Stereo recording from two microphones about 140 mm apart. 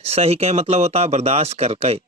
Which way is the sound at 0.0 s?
45° right (ahead or behind).